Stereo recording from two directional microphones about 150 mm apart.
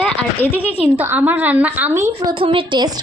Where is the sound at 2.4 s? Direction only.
35° right (ahead or behind).